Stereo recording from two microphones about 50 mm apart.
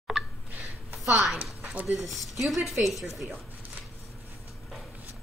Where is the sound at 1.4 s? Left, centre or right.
Right.